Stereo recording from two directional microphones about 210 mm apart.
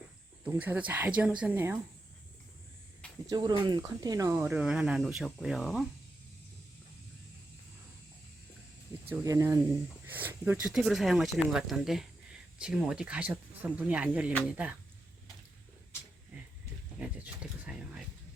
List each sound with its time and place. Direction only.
0.4 s speech: 10° right (ahead or behind)
3.2 s speech: 20° right (ahead or behind); by 5.8 s centre (ahead or behind)
9.0 s speech: 15° right (ahead or behind)
17.0 s speech: 5° right (ahead or behind)